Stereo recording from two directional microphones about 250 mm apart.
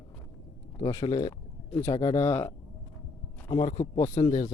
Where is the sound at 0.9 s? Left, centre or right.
Centre.